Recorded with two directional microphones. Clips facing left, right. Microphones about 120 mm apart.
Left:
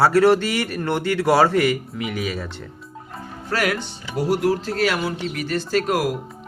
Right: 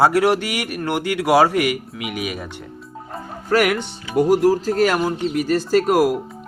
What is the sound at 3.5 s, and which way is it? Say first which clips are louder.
Speech: right 5 dB; 45° right (ahead or behind).